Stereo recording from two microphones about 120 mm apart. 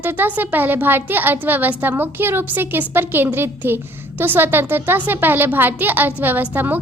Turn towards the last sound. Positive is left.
turn(degrees=-15)  # may be behind; listen again after turning